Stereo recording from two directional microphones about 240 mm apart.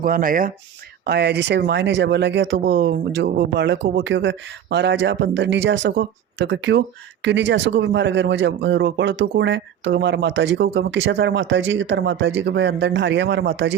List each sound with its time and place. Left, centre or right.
0.0 s speech: right